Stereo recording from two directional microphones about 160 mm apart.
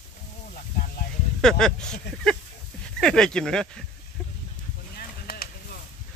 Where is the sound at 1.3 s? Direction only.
5° left (ahead or behind).